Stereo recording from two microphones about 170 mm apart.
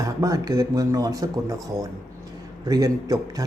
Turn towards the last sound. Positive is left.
turn(degrees=-20)  # may be behind; listen again after turning